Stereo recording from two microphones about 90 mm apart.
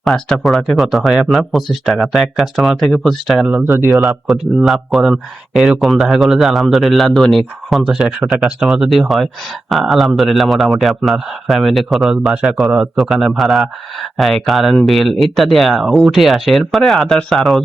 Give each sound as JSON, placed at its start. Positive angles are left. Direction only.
{"t": 0.0, "sound": "speech", "side_deg": 0}
{"t": 3.5, "sound": "speech", "side_deg": -25}
{"t": 3.9, "sound": "speech", "side_deg": 0}